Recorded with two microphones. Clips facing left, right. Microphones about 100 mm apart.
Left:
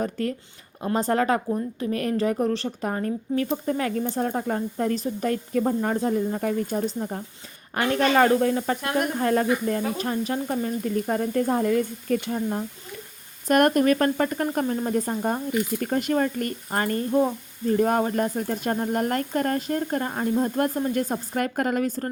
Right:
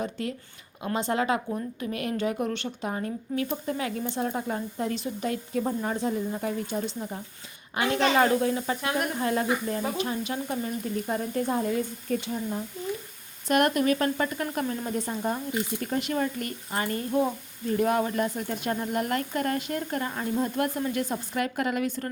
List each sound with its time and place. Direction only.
0.0 s a woman's voice: 45° left (ahead or behind)
8.8 s speech: 5° right (ahead or behind)
9.1 s a woman's voice: 45° left (ahead or behind)
13.5 s a woman's voice: 45° left (ahead or behind)